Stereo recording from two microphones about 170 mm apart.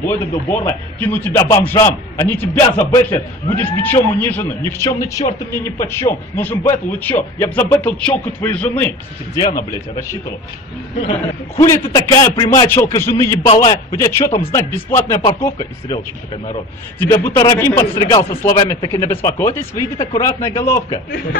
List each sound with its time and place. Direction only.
0.0 s speech: 10° left (ahead or behind)
11.5 s speech: 20° left (ahead or behind)
17.0 s speech: 15° left (ahead or behind)